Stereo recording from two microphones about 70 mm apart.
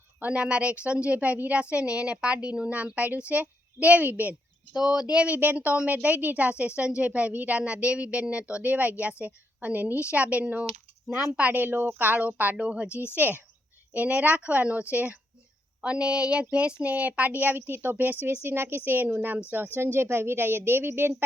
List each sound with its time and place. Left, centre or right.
0.2 s a woman's voice: centre
12.9 s speech: left
13.1 s a woman's voice: right
19.0 s a woman's voice: right
19.8 s speech: right